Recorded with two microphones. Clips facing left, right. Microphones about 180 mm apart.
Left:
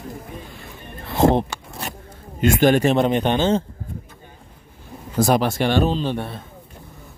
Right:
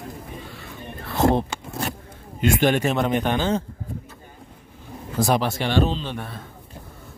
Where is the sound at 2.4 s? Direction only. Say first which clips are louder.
Left 4 dB; 40° left (ahead or behind); by 3.6 s 25° left (ahead or behind).